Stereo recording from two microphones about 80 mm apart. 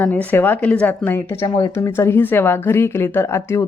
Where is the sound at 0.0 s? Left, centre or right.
Centre.